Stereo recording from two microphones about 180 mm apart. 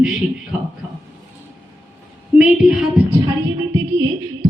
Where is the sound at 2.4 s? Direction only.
5° right (ahead or behind).